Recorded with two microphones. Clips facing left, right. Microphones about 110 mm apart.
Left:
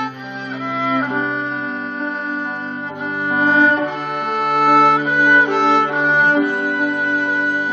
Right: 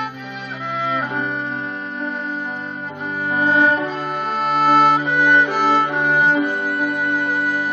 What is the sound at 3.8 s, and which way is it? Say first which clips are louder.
Music: left 1 dB; 5° left (ahead or behind).